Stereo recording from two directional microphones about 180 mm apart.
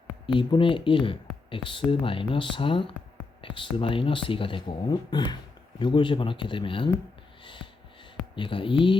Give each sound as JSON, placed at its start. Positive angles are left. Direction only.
{"t": 0.3, "sound": "speech", "side_deg": 30}
{"t": 7.4, "sound": "a sound", "side_deg": 25}
{"t": 8.4, "sound": "speech", "side_deg": 30}